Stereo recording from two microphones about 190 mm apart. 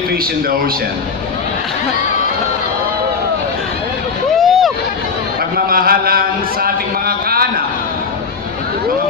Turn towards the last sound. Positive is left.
turn(degrees=-50)  # may be behind; listen again after turning